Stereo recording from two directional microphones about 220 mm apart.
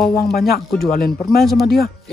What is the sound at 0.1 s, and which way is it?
Speech, 45° left (ahead or behind).